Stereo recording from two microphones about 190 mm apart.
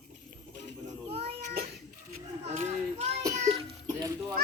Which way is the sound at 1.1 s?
30° right (ahead or behind).